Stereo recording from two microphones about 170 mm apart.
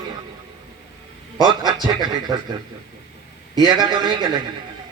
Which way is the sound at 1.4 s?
25° right (ahead or behind).